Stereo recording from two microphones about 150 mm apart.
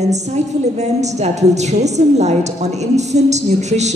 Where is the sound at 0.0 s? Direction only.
50° right (ahead or behind).